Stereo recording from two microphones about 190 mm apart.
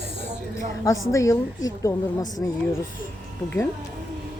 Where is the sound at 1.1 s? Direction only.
15° left (ahead or behind).